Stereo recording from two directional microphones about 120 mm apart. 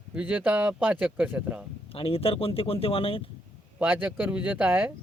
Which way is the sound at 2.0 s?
50° left (ahead or behind).